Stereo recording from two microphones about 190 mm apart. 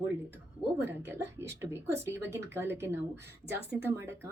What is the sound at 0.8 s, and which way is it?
A woman's voice, 10° right (ahead or behind).